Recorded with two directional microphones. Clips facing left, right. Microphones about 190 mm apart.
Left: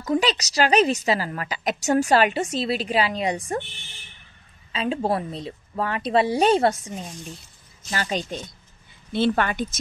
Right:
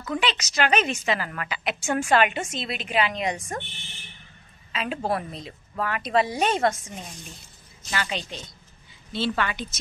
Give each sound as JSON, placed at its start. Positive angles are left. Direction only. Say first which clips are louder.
{"t": 0.0, "sound": "a woman's voice", "louder": "left 5 dB", "side_deg": 40}
{"t": 4.7, "sound": "a woman's voice", "louder": "left 3 dB", "side_deg": 30}
{"t": 7.9, "sound": "a woman's voice", "louder": "left 3 dB", "side_deg": 40}